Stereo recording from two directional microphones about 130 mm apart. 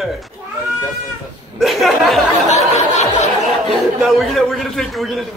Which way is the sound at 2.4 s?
60° left (ahead or behind).